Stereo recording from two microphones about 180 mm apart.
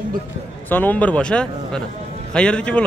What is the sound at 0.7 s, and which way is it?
Speech, 10° left (ahead or behind).